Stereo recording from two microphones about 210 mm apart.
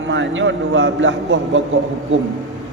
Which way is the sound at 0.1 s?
65° right (ahead or behind).